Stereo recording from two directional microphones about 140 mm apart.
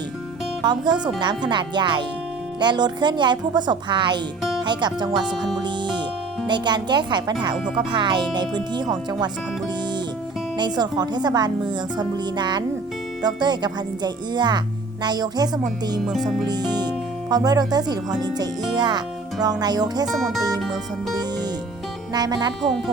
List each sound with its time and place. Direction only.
0.6 s speech: 30° right (ahead or behind)
5.6 s music: 35° right (ahead or behind)
6.5 s speech: 30° right (ahead or behind)
10.6 s speech: 30° right (ahead or behind)
16.0 s speech: centre (ahead or behind)
16.5 s speech: 30° right (ahead or behind)
20.1 s speech: centre (ahead or behind)
22.1 s speech: 30° right (ahead or behind)